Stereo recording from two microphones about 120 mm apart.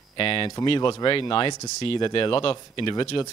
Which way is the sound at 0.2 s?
50° left (ahead or behind).